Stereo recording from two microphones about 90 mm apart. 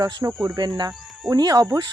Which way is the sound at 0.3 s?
45° right (ahead or behind).